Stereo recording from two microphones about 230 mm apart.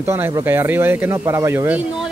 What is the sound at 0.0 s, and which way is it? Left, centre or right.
Speech, centre.